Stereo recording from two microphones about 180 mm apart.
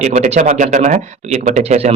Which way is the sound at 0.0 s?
45° right (ahead or behind).